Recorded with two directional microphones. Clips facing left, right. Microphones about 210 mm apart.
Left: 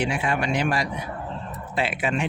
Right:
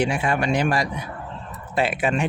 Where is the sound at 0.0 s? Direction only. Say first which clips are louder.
Right 3 dB; 45° right (ahead or behind).